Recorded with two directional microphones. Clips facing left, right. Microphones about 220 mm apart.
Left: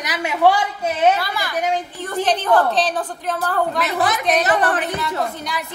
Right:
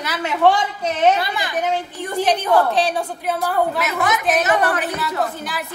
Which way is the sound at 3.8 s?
35° left (ahead or behind).